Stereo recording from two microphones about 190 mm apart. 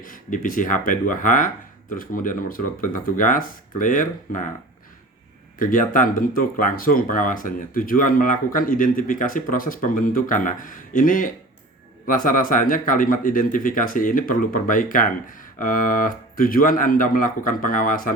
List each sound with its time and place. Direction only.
0.0 s speech: 45° left (ahead or behind)
5.5 s speech: 45° left (ahead or behind)